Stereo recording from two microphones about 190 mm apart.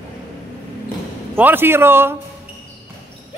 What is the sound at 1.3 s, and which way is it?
Speech, 10° right (ahead or behind).